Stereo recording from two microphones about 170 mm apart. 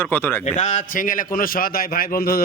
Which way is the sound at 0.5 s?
40° left (ahead or behind).